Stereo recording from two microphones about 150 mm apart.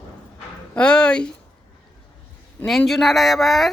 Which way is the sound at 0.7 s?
5° left (ahead or behind).